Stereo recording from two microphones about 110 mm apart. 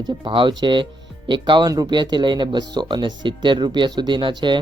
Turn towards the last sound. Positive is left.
turn(degrees=-45)  # may be behind; listen again after turning